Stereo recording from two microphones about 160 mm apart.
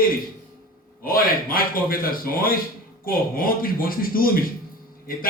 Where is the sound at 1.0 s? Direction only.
65° left (ahead or behind).